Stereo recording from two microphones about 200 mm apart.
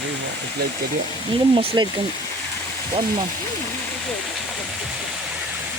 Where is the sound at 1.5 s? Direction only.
20° right (ahead or behind).